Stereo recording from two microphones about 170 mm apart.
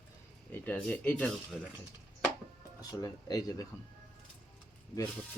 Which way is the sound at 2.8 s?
20° left (ahead or behind).